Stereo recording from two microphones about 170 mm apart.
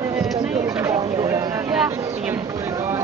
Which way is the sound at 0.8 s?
15° right (ahead or behind).